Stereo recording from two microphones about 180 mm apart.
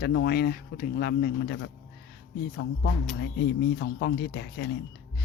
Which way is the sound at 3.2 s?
70° left (ahead or behind).